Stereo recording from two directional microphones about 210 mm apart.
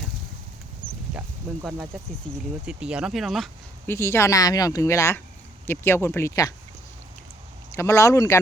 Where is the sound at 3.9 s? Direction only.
10° left (ahead or behind).